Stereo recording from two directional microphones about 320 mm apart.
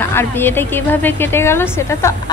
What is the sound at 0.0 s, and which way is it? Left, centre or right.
A woman's voice, centre.